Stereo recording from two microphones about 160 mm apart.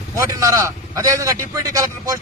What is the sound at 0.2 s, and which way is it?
A man's voice, 20° right (ahead or behind).